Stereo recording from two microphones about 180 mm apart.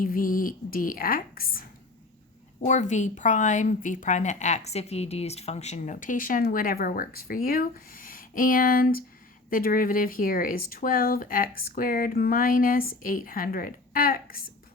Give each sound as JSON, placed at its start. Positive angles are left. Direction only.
{"t": 0.0, "sound": "a woman's voice", "side_deg": 50}
{"t": 2.6, "sound": "a woman's voice", "side_deg": 40}